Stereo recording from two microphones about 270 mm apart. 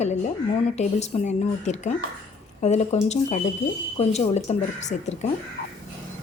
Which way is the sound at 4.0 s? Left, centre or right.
Left.